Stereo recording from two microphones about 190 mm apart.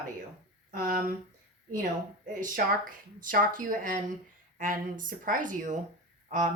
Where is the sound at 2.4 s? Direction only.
45° right (ahead or behind).